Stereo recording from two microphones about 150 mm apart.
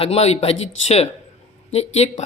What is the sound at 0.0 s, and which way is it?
Speech, 45° left (ahead or behind).